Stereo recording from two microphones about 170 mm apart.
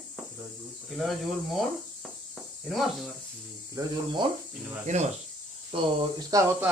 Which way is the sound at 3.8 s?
30° right (ahead or behind).